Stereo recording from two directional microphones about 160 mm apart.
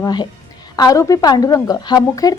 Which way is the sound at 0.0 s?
25° left (ahead or behind).